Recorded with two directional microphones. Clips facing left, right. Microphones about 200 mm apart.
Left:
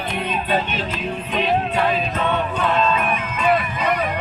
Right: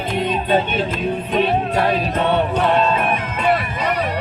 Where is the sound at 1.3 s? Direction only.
45° right (ahead or behind).